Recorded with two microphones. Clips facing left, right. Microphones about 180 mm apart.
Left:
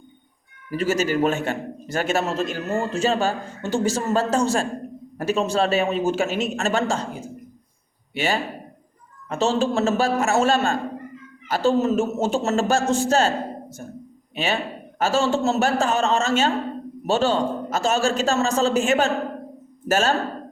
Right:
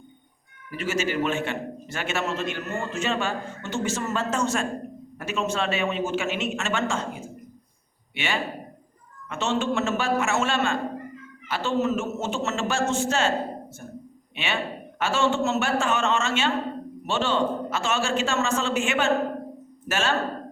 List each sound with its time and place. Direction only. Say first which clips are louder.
0.7 s a man's voice: left 5 dB; 40° left (ahead or behind)
14.3 s a man's voice: left 4 dB; 40° left (ahead or behind)